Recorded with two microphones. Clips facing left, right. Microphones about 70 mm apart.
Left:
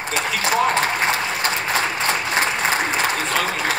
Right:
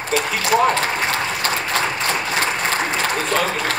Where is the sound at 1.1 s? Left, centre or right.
Centre.